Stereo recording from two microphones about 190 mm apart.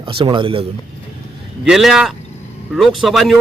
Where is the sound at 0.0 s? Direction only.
25° right (ahead or behind).